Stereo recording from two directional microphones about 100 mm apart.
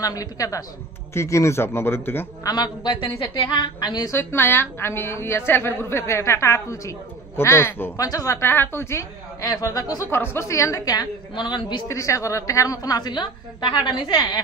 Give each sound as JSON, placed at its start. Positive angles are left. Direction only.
{"t": 0.0, "sound": "a woman's voice", "side_deg": 35}
{"t": 2.4, "sound": "a woman's voice", "side_deg": 45}
{"t": 4.1, "sound": "a woman's voice", "side_deg": 25}
{"t": 8.0, "sound": "a woman's voice", "side_deg": 35}
{"t": 9.4, "sound": "a woman's voice", "side_deg": 35}
{"t": 10.0, "sound": "a woman's voice", "side_deg": 25}
{"t": 11.9, "sound": "a woman's voice", "side_deg": 30}